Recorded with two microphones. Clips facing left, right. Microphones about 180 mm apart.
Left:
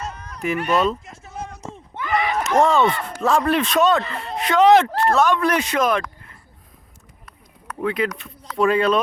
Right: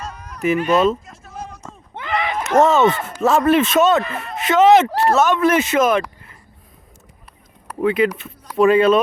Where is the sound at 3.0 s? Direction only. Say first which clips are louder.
Right 3 dB; 5° right (ahead or behind).